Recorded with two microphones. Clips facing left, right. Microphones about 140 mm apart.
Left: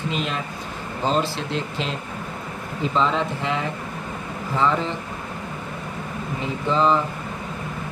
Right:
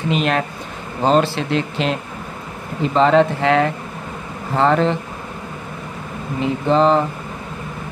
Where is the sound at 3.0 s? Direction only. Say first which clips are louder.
Right 10 dB; 75° right (ahead or behind).